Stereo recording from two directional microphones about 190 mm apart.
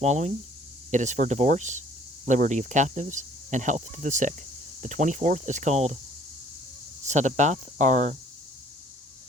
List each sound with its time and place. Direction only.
0.0 s speech: 40° right (ahead or behind)
7.0 s speech: 40° right (ahead or behind)